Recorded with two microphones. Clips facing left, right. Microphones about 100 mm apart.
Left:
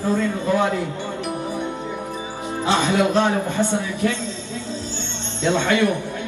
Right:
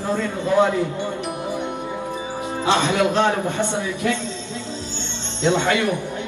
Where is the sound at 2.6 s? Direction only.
20° right (ahead or behind).